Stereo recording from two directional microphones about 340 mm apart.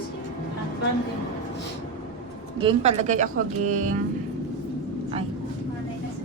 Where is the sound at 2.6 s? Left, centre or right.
Centre.